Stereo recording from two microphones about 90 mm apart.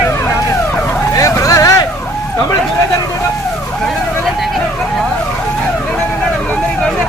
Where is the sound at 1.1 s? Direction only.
40° left (ahead or behind).